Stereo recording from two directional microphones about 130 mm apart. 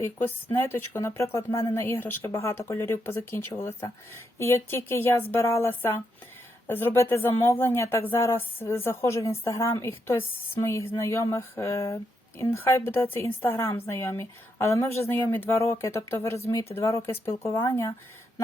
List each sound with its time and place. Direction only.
0.0 s a woman's voice: 15° left (ahead or behind)